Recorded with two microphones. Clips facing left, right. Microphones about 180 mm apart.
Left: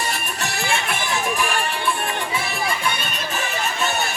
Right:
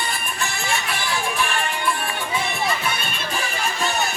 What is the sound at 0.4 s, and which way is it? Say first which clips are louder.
Music: left 2 dB; 50° left (ahead or behind).